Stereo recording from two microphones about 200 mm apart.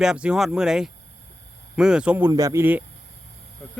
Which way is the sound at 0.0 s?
5° right (ahead or behind).